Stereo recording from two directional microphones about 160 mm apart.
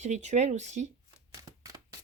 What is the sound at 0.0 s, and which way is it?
Speech, 45° right (ahead or behind).